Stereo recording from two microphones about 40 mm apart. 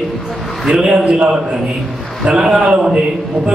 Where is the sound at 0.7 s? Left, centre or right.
Right.